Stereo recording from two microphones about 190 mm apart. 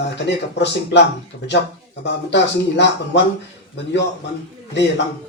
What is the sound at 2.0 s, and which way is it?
Speech, 65° left (ahead or behind).